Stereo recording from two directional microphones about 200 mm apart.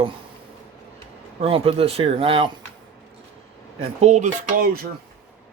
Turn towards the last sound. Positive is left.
turn(degrees=-35)  # may be behind; listen again after turning